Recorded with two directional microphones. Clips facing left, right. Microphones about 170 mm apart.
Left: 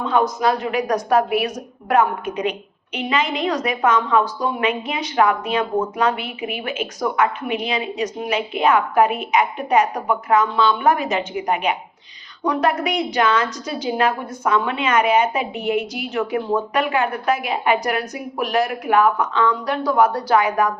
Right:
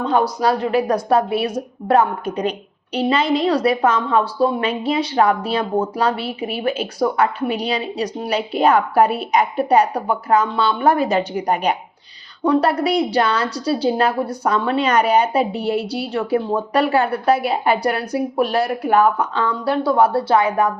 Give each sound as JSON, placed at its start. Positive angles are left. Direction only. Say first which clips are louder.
{"t": 0.0, "sound": "a woman's voice", "louder": "right 1 dB", "side_deg": -35}